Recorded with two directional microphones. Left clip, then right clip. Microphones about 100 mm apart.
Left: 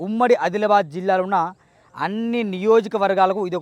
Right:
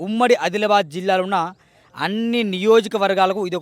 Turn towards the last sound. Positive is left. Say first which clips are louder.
# even
turn(degrees=-30)  # may be behind; listen again after turning